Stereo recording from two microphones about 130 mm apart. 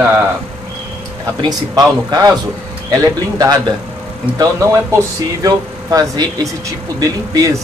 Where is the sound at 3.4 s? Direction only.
30° right (ahead or behind).